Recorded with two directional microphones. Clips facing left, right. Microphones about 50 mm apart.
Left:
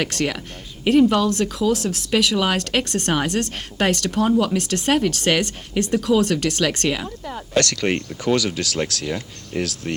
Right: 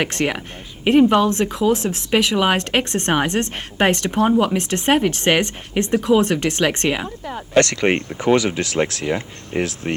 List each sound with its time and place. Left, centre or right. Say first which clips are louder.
0.0 s speech: right 2 dB; right